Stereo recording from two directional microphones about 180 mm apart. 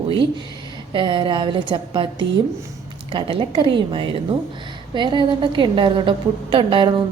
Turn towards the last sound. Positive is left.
turn(degrees=-30)  # may be behind; listen again after turning